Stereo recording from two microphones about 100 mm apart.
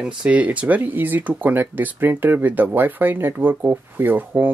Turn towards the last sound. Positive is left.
turn(degrees=-20)  # may be behind; listen again after turning